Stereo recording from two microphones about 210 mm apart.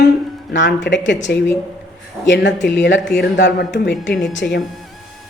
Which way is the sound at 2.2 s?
60° left (ahead or behind).